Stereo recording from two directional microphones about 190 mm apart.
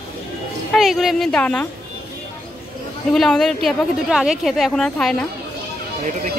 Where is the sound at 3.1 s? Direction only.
Centre (ahead or behind).